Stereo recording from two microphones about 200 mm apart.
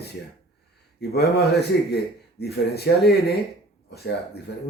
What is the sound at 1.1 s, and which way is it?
Speech, 50° left (ahead or behind).